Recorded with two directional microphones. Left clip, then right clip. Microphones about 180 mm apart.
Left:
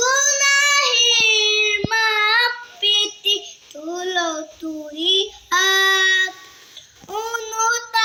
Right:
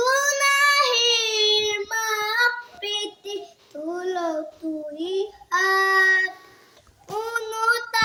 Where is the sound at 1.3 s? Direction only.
35° right (ahead or behind).